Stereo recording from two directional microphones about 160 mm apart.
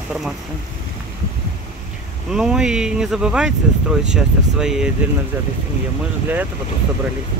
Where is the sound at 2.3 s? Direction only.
5° right (ahead or behind).